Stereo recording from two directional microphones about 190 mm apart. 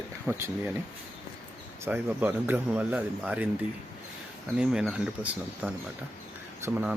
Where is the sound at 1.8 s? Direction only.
10° right (ahead or behind).